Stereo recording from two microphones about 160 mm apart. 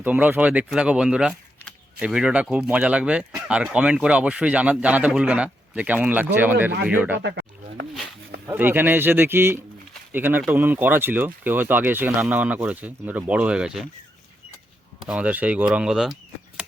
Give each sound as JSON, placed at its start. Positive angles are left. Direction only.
{"t": 0.0, "sound": "speech", "side_deg": -10}
{"t": 7.2, "sound": "a sound", "side_deg": -90}
{"t": 8.4, "sound": "speech", "side_deg": -15}
{"t": 15.0, "sound": "speech", "side_deg": -10}